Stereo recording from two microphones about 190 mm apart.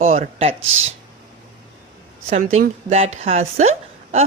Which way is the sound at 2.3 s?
35° right (ahead or behind).